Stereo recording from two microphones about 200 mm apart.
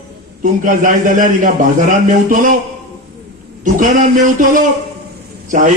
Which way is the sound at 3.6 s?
40° right (ahead or behind).